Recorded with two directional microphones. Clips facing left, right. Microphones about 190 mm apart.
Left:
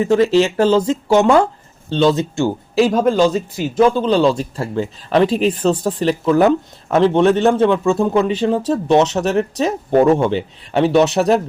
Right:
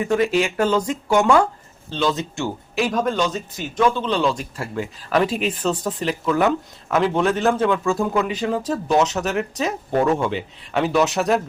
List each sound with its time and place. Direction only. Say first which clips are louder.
0.0 s speech: left 6 dB; 25° left (ahead or behind)